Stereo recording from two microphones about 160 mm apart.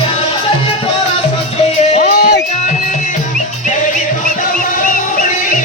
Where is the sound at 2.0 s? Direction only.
85° left.